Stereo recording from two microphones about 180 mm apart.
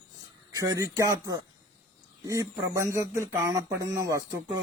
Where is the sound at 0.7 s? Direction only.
15° right (ahead or behind).